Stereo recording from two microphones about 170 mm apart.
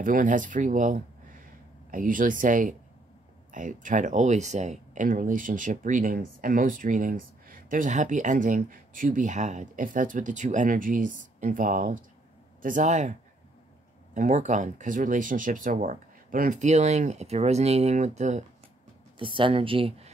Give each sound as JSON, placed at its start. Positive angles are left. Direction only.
{"t": 0.0, "sound": "speech", "side_deg": -50}
{"t": 14.1, "sound": "speech", "side_deg": -45}
{"t": 19.1, "sound": "speech", "side_deg": -30}